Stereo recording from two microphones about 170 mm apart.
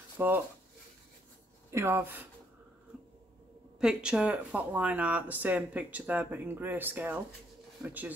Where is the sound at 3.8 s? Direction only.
5° right (ahead or behind).